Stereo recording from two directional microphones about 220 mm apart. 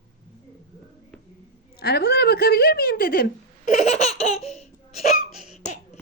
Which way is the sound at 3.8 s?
30° left (ahead or behind).